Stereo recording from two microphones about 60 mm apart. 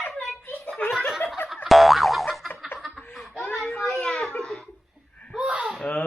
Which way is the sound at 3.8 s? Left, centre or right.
Centre.